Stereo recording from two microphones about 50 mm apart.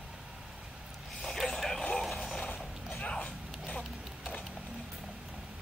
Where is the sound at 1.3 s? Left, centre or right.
Centre.